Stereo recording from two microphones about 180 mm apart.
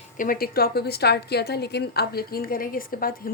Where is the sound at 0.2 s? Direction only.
55° left (ahead or behind).